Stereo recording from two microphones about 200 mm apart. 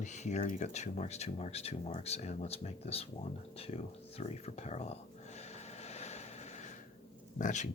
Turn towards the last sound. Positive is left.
turn(degrees=40)  # may be behind; listen again after turning